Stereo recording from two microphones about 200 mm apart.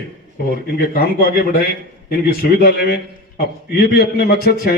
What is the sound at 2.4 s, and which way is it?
A man's voice, 50° left (ahead or behind).